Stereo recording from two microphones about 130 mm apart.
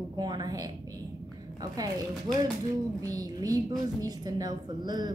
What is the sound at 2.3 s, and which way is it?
A woman's voice, 30° right (ahead or behind).